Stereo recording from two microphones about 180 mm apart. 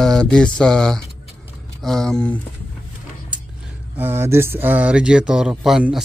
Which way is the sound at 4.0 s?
15° right (ahead or behind).